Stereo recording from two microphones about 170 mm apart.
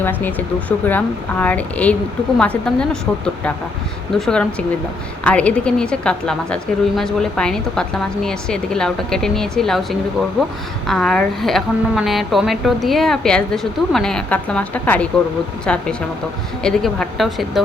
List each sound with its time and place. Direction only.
0.0 s a woman's voice: 10° left (ahead or behind)